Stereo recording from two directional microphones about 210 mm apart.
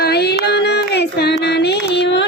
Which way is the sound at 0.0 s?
50° left (ahead or behind).